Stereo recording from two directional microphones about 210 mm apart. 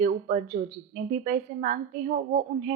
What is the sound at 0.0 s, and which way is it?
A woman's voice, 35° right (ahead or behind).